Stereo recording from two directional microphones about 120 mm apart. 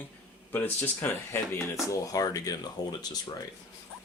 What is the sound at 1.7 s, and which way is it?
Speech, 30° left (ahead or behind).